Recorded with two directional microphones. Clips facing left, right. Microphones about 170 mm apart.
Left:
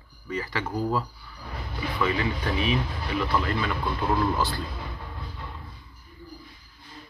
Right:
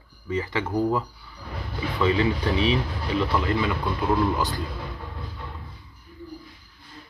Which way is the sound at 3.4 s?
15° right (ahead or behind).